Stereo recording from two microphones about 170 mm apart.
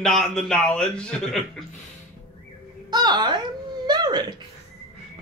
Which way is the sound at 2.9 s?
25° right (ahead or behind).